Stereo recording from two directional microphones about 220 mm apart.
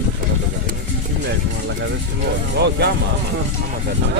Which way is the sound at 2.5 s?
50° right (ahead or behind).